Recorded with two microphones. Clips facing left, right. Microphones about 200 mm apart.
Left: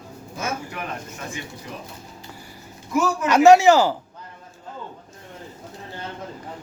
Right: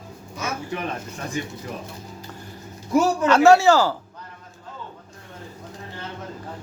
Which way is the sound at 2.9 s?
35° right (ahead or behind).